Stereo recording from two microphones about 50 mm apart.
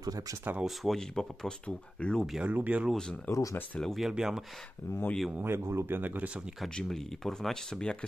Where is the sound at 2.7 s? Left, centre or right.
Right.